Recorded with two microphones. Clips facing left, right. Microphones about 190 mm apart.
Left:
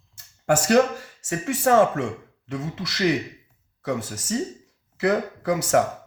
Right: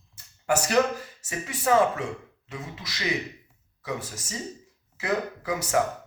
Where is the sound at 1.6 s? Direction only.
55° left (ahead or behind).